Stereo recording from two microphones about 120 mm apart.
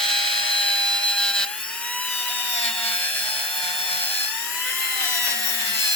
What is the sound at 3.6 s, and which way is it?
Tools, 55° left (ahead or behind).